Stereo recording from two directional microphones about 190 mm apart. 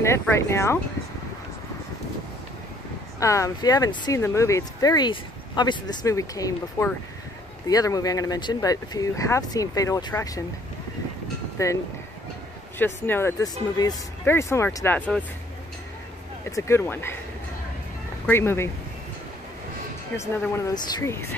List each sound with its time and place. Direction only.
0.0 s speech: 15° left (ahead or behind)
3.2 s speech: 15° left (ahead or behind)
11.5 s speech: 15° left (ahead or behind)
16.4 s speech: 15° left (ahead or behind)
18.2 s speech: 10° left (ahead or behind)
20.2 s speech: 15° left (ahead or behind)